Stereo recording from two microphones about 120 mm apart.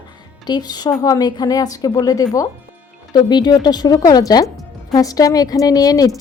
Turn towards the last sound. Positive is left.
turn(degrees=30)  # may be behind; listen again after turning